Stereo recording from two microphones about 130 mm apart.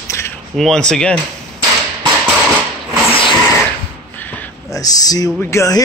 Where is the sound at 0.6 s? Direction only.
5° left (ahead or behind).